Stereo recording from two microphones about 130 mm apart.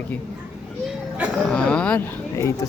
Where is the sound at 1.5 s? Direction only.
10° left (ahead or behind).